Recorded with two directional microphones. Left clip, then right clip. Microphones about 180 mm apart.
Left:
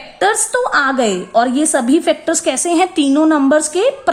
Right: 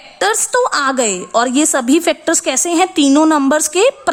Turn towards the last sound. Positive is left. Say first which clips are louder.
# right 1 dB
turn(degrees=-30)  # may be behind; listen again after turning